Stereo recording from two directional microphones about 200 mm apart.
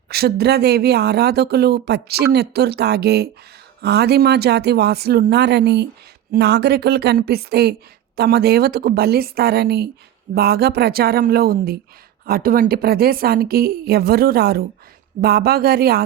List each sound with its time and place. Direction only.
0.1 s speech: 55° right (ahead or behind)